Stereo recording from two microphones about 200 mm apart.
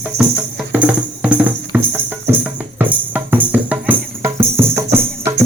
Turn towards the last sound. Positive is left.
turn(degrees=-10)  # may be behind; listen again after turning